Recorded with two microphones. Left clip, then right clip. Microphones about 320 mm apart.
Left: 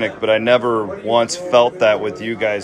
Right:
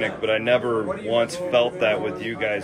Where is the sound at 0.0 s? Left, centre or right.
Centre.